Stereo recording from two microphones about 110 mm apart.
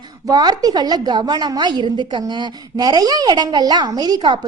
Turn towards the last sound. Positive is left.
turn(degrees=-40)  # may be behind; listen again after turning